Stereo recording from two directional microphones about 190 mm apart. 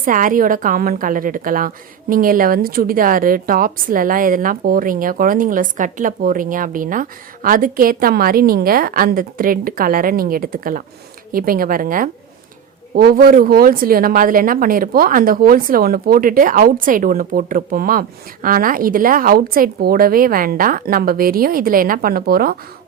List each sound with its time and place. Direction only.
0.0 s a woman's voice: 45° right (ahead or behind)